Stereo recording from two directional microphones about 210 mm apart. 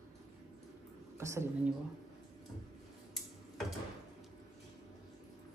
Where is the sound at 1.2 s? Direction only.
15° right (ahead or behind).